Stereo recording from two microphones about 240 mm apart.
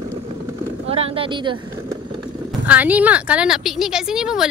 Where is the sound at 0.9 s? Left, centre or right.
Right.